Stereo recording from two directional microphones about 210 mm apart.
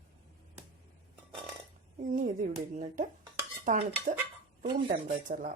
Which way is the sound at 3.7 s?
35° right (ahead or behind).